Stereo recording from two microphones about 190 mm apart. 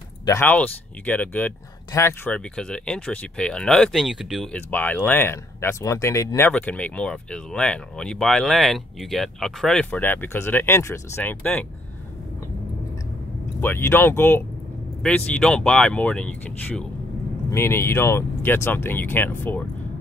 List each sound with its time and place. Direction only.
0.2 s speech: 15° left (ahead or behind)
13.6 s speech: 10° left (ahead or behind)